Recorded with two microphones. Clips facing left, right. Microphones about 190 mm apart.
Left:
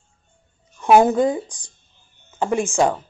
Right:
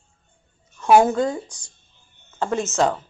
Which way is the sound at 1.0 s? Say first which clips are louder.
Left 3 dB; 15° left (ahead or behind).